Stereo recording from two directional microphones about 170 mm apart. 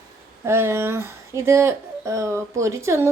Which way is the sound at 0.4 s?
15° right (ahead or behind).